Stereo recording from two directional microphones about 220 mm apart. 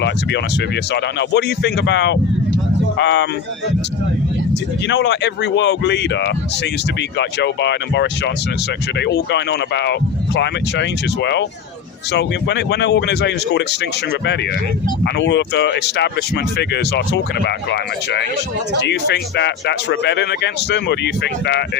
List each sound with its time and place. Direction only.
0.0 s speech: 55° left (ahead or behind)
4.9 s speech: 50° left (ahead or behind)